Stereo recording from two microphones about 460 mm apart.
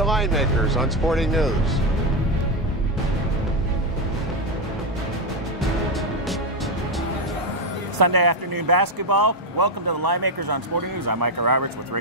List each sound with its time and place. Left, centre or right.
0.0 s speech: centre
5.6 s music: centre
8.0 s speech: right